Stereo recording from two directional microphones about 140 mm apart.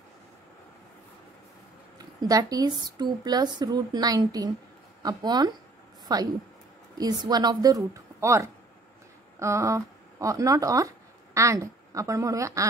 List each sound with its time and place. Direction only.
2.0 s a woman's voice: 25° right (ahead or behind)